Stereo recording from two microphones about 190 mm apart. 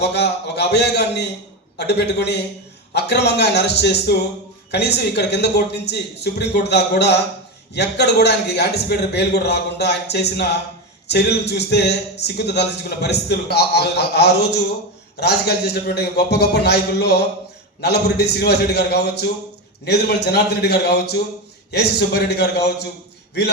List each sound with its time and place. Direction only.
0.0 s a man's voice: 60° left (ahead or behind)